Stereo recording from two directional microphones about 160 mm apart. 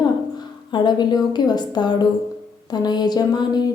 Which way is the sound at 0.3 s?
25° left (ahead or behind).